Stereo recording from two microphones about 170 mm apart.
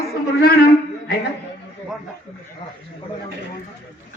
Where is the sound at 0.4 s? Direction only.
65° left (ahead or behind).